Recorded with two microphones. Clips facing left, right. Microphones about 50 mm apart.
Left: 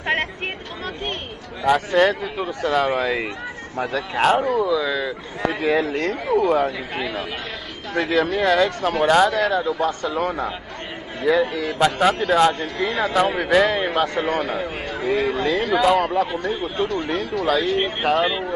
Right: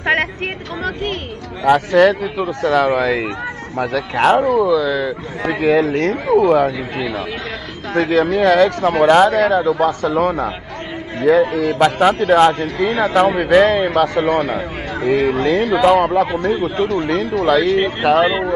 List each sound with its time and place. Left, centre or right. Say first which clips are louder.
0.0 s a sound: right 6 dB; right
1.9 s speech: right 6 dB; right
4.6 s speech: right 5 dB; right
5.5 s speech: right 7 dB; right
7.9 s speech: right 5 dB; right
9.0 s a man's voice: right 5 dB; right
9.7 s speech: right 6 dB; right
12.3 s a man's voice: right 5 dB; right
15.9 s speech: right 5 dB; right